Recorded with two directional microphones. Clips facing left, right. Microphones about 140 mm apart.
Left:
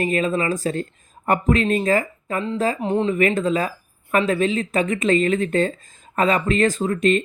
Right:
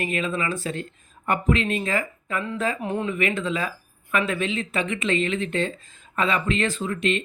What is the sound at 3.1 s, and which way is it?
Speech, 40° left (ahead or behind).